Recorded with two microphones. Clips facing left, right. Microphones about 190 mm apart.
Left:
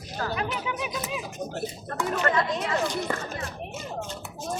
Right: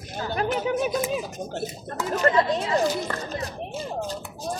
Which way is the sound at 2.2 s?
35° right (ahead or behind).